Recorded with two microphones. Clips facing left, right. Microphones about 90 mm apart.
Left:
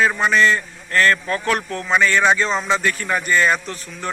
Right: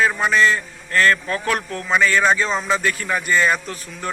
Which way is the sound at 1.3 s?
30° left (ahead or behind).